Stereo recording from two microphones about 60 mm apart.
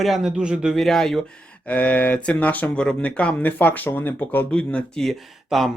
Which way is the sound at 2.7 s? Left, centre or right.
Centre.